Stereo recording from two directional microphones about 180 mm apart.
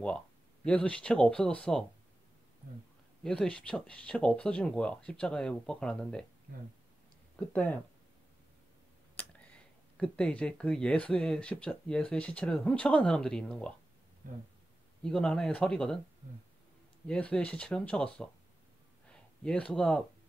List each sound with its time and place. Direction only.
0.7 s speech: 5° left (ahead or behind)
3.3 s speech: 5° left (ahead or behind)
7.3 s speech: 10° left (ahead or behind)
9.1 s speech: 10° left (ahead or behind)
15.0 s speech: 5° left (ahead or behind)
17.1 s speech: 5° left (ahead or behind)
19.0 s a sound: 5° left (ahead or behind)